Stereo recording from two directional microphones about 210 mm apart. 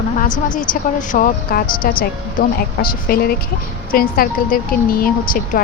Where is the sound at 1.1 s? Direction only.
40° left (ahead or behind).